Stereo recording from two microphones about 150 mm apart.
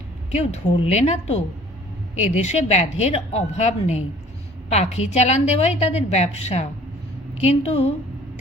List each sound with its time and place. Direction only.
0.3 s a woman's voice: 45° left (ahead or behind)